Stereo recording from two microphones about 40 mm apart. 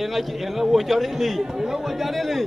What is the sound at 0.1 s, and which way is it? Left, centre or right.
Speech, centre.